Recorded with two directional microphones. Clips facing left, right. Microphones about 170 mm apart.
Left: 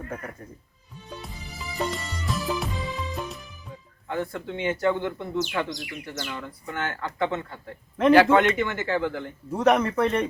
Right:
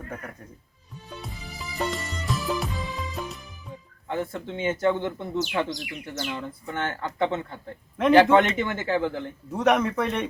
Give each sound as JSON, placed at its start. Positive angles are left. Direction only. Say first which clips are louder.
{"t": 1.1, "sound": "music", "louder": "even", "side_deg": 0}
{"t": 4.1, "sound": "speech", "louder": "even", "side_deg": -20}
{"t": 9.5, "sound": "speech", "louder": "left 1 dB", "side_deg": 0}